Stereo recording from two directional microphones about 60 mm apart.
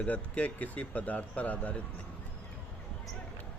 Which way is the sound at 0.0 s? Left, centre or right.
Left.